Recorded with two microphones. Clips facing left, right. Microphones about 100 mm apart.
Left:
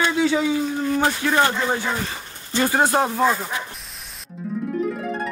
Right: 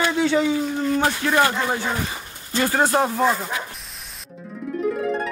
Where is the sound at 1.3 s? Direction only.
25° left (ahead or behind).